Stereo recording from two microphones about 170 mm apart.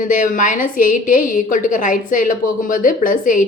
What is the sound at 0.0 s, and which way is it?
A woman's voice, 50° left (ahead or behind).